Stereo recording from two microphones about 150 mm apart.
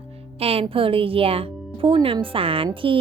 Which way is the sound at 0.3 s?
40° right (ahead or behind).